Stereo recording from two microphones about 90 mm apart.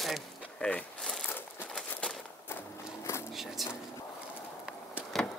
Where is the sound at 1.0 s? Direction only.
5° left (ahead or behind).